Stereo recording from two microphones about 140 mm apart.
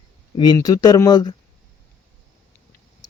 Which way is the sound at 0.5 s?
25° left (ahead or behind).